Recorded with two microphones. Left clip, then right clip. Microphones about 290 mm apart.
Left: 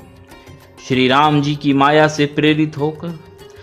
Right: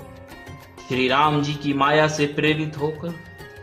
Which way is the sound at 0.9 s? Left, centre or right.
Left.